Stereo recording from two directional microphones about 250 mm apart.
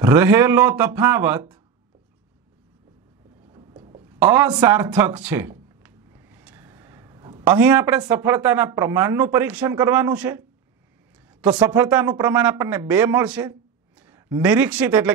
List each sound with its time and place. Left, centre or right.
0.0 s speech: centre
3.5 s a sound: centre
4.2 s speech: centre